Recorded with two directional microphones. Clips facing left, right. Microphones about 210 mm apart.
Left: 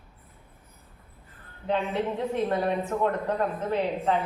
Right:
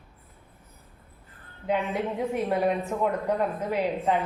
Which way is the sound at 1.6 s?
10° right (ahead or behind).